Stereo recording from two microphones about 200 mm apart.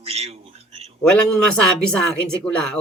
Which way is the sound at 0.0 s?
30° right (ahead or behind).